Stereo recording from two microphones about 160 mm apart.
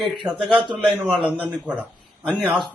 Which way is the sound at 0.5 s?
30° right (ahead or behind).